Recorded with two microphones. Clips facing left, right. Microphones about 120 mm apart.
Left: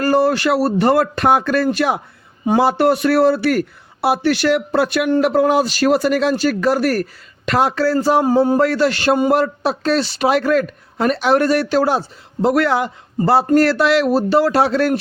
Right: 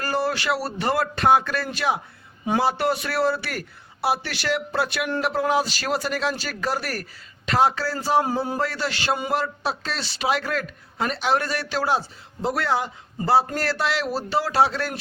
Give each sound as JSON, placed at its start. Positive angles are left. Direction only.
{"t": 0.0, "sound": "a man's voice", "side_deg": 55}
{"t": 8.2, "sound": "a man's voice", "side_deg": 40}
{"t": 13.1, "sound": "a man's voice", "side_deg": 55}